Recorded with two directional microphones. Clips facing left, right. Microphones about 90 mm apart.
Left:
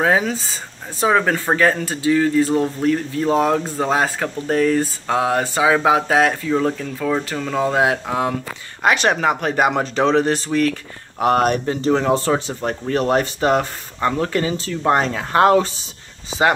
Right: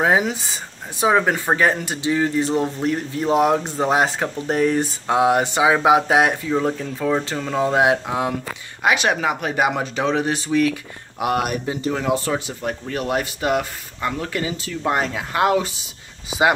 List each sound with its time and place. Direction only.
0.0 s speech: 20° right (ahead or behind)
11.1 s speech: 40° left (ahead or behind)
11.5 s speech: 10° right (ahead or behind)
12.3 s speech: 25° left (ahead or behind)
12.6 s speech: 40° left (ahead or behind)